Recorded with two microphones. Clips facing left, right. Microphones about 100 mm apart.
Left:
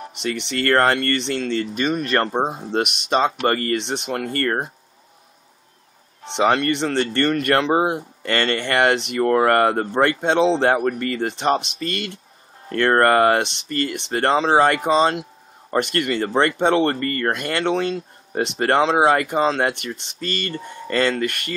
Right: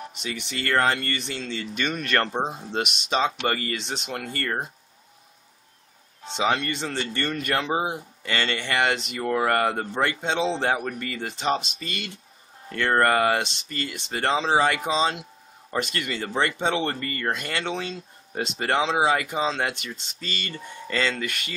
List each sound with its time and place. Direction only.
0.2 s speech: 70° left (ahead or behind)
1.0 s speech: 75° left (ahead or behind); by 1.7 s 60° left (ahead or behind)
2.0 s speech: 35° left (ahead or behind); by 4.7 s 55° left (ahead or behind)
6.3 s speech: 55° left (ahead or behind)
11.6 s speech: centre (ahead or behind)
12.6 s speech: 50° left (ahead or behind)